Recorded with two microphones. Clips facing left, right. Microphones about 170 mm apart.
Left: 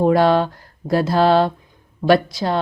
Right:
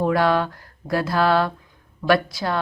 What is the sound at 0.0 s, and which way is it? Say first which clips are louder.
Mantra: left 5 dB; 30° left (ahead or behind).